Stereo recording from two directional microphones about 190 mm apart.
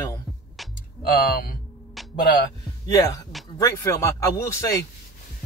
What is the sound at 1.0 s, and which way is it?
Speech, 50° left (ahead or behind).